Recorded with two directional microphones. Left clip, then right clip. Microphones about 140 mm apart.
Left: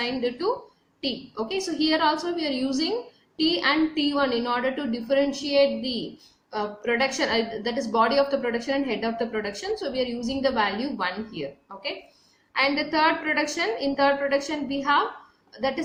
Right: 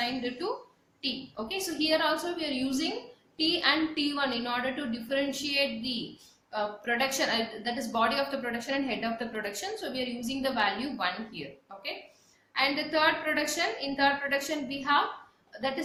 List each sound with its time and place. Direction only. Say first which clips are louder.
0.0 s a woman's voice: left 6 dB; 40° left (ahead or behind)